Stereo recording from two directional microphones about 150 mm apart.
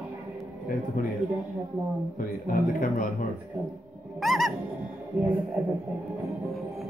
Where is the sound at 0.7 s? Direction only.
65° left (ahead or behind).